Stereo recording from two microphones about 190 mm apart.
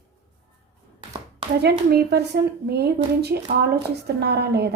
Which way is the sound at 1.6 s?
60° right (ahead or behind).